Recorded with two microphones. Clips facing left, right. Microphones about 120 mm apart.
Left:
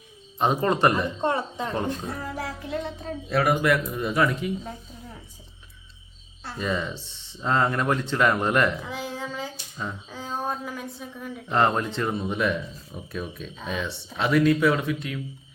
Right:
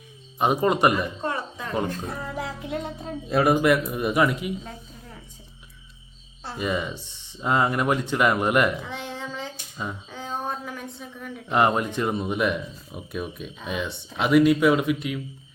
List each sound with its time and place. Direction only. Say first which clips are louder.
0.3 s speech: right 1 dB; 10° right (ahead or behind)
1.2 s a sound: left 4 dB; 25° left (ahead or behind)
2.0 s speech: even; 20° right (ahead or behind)
6.4 s speech: right 1 dB; 15° right (ahead or behind)
8.9 s a sound: left 1 dB; 5° left (ahead or behind)
11.5 s speech: right 1 dB; 10° right (ahead or behind)